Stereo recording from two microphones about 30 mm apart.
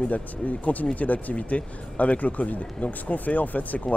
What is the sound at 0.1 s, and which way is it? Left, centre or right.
Speech, left.